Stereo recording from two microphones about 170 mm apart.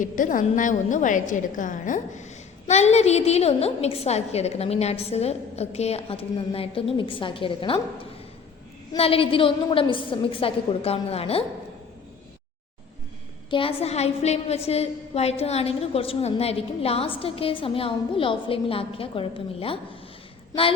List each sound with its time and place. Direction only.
0.0 s a woman's voice: 50° left (ahead or behind); by 7.8 s 30° left (ahead or behind)
9.0 s a woman's voice: 35° left (ahead or behind)
13.5 s a woman's voice: 30° left (ahead or behind)